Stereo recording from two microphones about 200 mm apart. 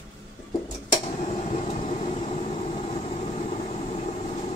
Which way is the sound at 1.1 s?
30° left (ahead or behind).